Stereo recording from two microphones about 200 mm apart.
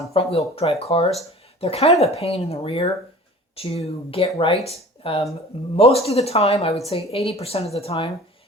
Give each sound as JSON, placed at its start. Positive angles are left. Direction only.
{"t": 0.1, "sound": "a woman's voice", "side_deg": 30}